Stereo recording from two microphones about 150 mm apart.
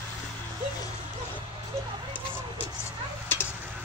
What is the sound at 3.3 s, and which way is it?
Tick-tock, 15° left (ahead or behind).